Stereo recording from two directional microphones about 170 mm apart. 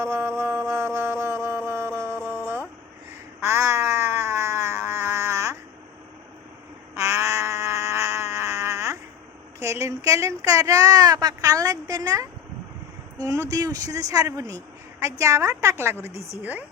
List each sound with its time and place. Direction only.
0.0 s music: 15° right (ahead or behind)
3.4 s cat: 15° right (ahead or behind)
6.9 s frog: 15° right (ahead or behind)
9.6 s a woman's voice: 15° right (ahead or behind)